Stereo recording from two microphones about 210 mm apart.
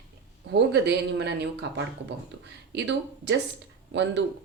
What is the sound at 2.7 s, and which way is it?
Speech, 55° right (ahead or behind).